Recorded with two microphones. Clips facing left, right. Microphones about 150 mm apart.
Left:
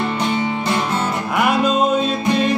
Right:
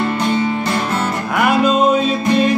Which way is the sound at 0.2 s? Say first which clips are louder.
Right 3 dB; 20° left (ahead or behind).